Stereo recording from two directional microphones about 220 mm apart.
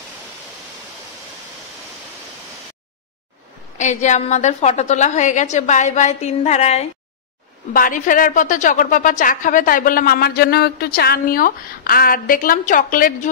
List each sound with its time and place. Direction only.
3.7 s a woman's voice: 35° left (ahead or behind)